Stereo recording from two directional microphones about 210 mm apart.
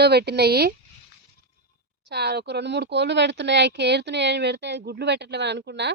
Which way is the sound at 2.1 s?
50° right (ahead or behind).